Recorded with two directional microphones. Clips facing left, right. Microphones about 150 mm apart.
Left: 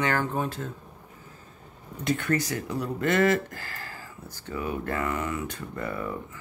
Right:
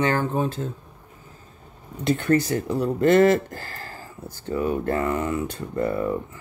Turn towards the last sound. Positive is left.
turn(degrees=-30)  # may be behind; listen again after turning